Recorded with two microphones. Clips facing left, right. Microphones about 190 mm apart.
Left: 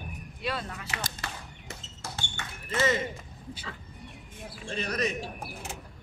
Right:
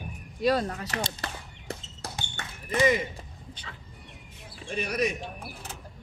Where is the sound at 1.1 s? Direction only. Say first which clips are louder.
Right 2 dB; 35° right (ahead or behind).